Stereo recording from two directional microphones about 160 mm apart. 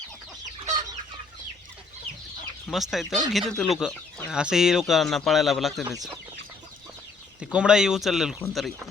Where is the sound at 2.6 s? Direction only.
Centre (ahead or behind).